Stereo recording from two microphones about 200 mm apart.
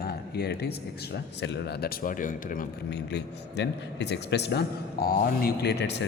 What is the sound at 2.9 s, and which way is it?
A man's voice, 60° left (ahead or behind).